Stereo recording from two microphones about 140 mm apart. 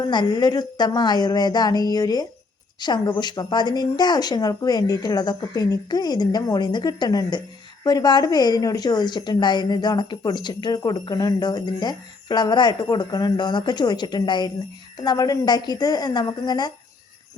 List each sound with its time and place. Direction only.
0.1 s a woman's voice: 30° left (ahead or behind)